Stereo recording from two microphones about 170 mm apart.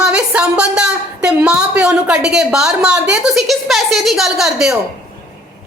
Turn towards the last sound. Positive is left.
turn(degrees=0)  # may be behind; listen again after turning